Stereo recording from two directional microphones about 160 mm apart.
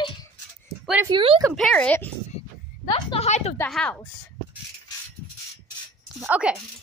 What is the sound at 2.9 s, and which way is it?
Speech, 35° left (ahead or behind).